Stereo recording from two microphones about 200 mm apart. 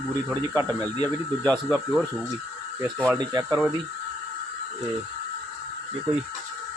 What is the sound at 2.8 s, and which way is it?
Speech, 10° right (ahead or behind).